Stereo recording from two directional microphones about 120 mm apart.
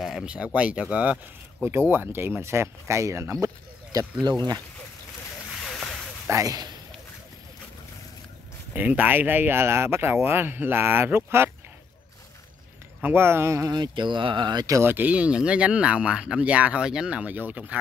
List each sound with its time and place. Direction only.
0.0 s speech: 5° right (ahead or behind); by 4.1 s 25° right (ahead or behind)
4.3 s speech: 35° right (ahead or behind)
5.6 s a sound: 5° left (ahead or behind)
6.2 s speech: 25° right (ahead or behind)
8.7 s speech: 15° right (ahead or behind)
13.0 s speech: 20° right (ahead or behind)
13.7 s speech: 40° right (ahead or behind)
14.8 s speech: 15° right (ahead or behind)